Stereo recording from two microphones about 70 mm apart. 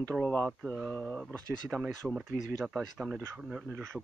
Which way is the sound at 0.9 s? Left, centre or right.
Centre.